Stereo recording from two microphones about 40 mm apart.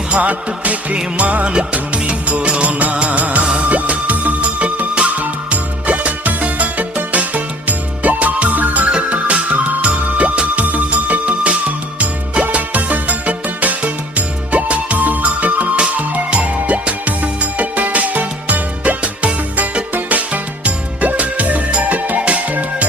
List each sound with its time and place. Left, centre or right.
0.1 s music: right
8.9 s music: right